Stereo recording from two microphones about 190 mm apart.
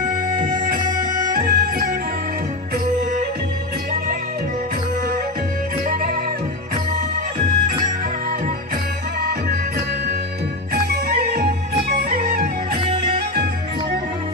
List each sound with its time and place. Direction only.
0.0 s music: 45° right (ahead or behind)
7.3 s music: 50° right (ahead or behind)
10.7 s music: 55° right (ahead or behind)